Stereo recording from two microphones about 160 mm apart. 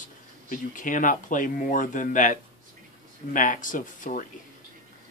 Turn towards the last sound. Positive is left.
turn(degrees=55)  # may be behind; listen again after turning